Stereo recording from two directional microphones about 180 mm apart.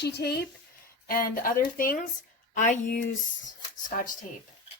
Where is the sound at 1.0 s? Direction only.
50° left (ahead or behind).